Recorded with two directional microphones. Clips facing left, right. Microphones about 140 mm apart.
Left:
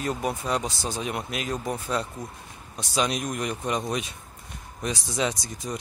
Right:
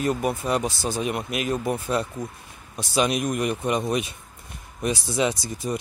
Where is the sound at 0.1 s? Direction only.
5° right (ahead or behind).